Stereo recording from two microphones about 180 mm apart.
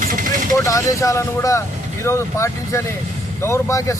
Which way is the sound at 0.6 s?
20° left (ahead or behind).